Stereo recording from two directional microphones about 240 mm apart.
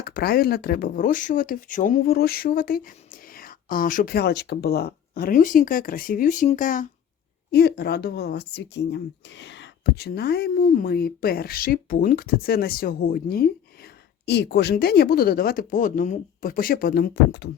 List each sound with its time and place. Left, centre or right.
0.0 s speech: left